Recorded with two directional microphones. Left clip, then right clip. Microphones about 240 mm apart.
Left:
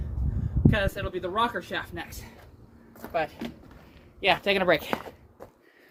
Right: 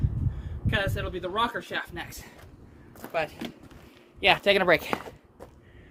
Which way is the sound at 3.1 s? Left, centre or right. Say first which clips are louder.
Left 1 dB; right.